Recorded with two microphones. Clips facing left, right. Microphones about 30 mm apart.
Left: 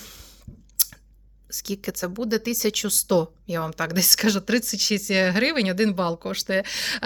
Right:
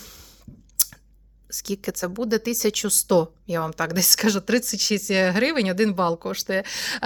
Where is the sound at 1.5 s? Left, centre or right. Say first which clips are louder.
Right 2 dB; centre.